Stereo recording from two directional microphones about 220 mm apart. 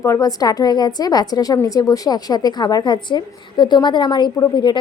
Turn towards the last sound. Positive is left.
turn(degrees=20)  # may be behind; listen again after turning